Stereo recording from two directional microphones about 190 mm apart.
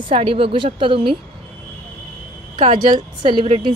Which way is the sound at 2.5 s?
30° right (ahead or behind).